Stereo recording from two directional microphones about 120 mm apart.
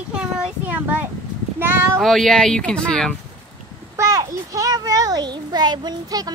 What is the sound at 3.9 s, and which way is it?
A child's voice, 30° right (ahead or behind).